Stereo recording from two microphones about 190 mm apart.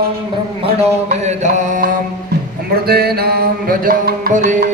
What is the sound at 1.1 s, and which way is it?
Mantra, 40° right (ahead or behind).